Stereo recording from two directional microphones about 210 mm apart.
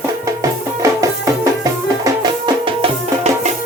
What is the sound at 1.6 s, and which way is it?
Music, 20° right (ahead or behind).